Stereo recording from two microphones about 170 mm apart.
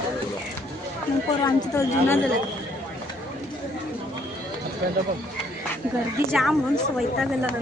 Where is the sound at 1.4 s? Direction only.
20° left (ahead or behind).